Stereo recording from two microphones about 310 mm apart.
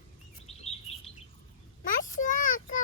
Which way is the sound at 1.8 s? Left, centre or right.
Left.